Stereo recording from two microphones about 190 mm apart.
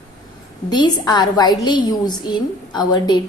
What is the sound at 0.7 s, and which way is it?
A woman's voice, 25° left (ahead or behind).